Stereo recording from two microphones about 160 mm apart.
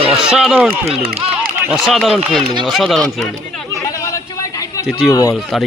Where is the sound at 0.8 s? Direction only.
40° right (ahead or behind).